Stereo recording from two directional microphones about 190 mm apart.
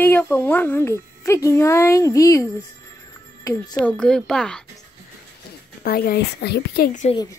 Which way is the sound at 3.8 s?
5° left (ahead or behind).